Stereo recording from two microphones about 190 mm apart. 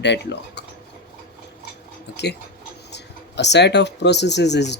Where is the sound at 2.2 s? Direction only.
60° left (ahead or behind).